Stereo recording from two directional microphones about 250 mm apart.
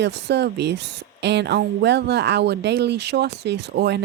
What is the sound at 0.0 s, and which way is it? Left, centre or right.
Speech, right.